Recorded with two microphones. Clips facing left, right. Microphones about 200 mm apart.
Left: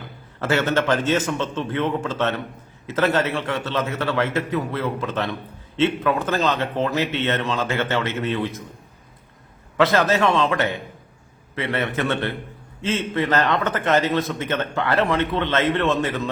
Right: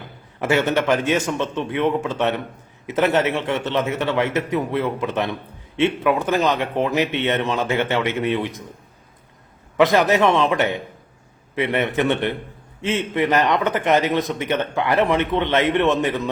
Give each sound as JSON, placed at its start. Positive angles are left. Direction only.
{"t": 0.3, "sound": "a man's voice", "side_deg": -15}
{"t": 9.7, "sound": "a man's voice", "side_deg": -15}